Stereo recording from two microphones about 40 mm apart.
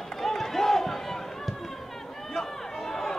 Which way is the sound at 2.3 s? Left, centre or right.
Centre.